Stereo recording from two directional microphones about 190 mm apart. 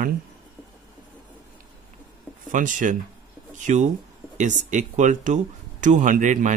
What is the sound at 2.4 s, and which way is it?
Speech, 40° right (ahead or behind).